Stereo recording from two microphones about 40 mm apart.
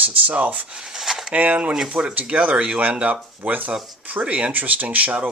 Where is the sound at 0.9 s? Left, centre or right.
Centre.